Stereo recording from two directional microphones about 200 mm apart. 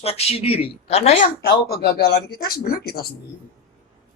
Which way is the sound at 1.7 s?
50° left (ahead or behind).